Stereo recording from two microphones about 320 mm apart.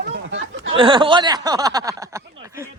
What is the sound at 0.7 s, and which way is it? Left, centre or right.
Speech, centre.